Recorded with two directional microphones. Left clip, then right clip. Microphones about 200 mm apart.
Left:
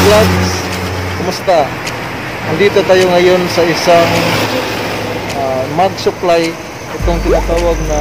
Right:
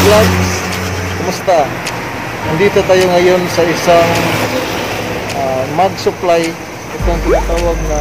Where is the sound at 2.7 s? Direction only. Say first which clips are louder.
Left 1 dB; 5° left (ahead or behind).